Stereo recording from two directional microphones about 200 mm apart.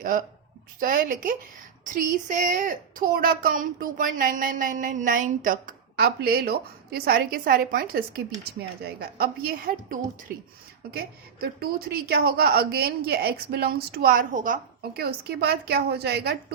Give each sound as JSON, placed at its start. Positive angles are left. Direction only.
{"t": 0.0, "sound": "a woman's voice", "side_deg": -45}